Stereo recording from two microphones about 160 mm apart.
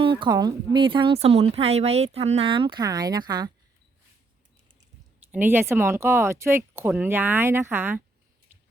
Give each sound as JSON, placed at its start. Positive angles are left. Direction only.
{"t": 0.0, "sound": "speech", "side_deg": -30}
{"t": 5.3, "sound": "speech", "side_deg": -10}
{"t": 8.5, "sound": "chewing", "side_deg": -10}